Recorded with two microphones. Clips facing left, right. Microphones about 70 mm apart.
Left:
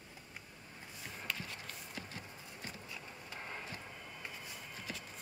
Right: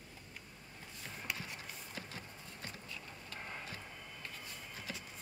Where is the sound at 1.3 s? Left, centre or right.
Centre.